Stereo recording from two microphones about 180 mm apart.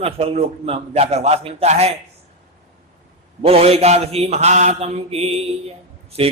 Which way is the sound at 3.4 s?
35° right (ahead or behind).